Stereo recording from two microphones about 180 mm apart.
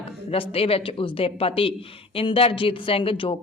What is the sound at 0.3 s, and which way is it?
Speech, 30° left (ahead or behind).